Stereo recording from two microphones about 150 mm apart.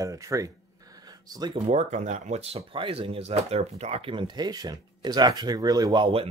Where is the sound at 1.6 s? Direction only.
50° right (ahead or behind).